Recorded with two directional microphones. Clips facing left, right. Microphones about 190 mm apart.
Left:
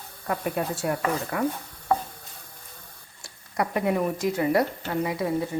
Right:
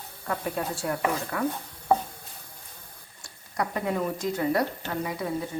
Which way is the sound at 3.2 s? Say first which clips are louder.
Left 3 dB; 20° left (ahead or behind).